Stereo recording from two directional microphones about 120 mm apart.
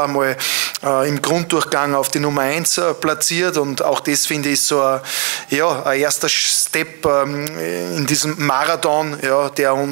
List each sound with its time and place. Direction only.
0.0 s speech: 25° right (ahead or behind)